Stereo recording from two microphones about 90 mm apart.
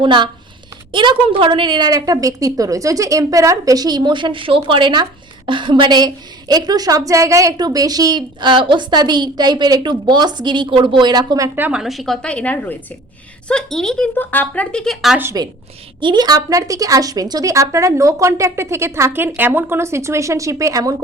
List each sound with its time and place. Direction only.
0.0 s a woman's voice: 60° right (ahead or behind)
1.9 s a woman's voice: 40° right (ahead or behind)
11.7 s a woman's voice: 5° right (ahead or behind)
14.2 s a woman's voice: 20° left (ahead or behind)
15.3 s a woman's voice: 45° right (ahead or behind)